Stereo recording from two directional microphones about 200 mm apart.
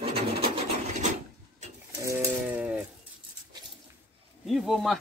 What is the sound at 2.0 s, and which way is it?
Sheep, 10° right (ahead or behind).